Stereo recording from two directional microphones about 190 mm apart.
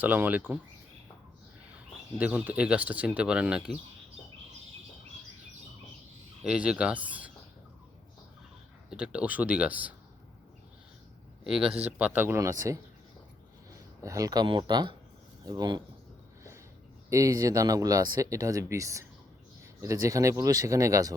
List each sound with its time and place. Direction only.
0.0 s speech: 10° right (ahead or behind)
1.7 s speech: 5° right (ahead or behind)
6.4 s speech: 5° right (ahead or behind)
8.9 s speech: 5° right (ahead or behind)
11.4 s speech: 5° right (ahead or behind)
14.0 s speech: 15° right (ahead or behind)
17.1 s speech: 15° right (ahead or behind)